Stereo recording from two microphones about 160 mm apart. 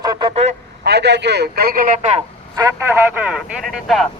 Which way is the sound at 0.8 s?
90° right.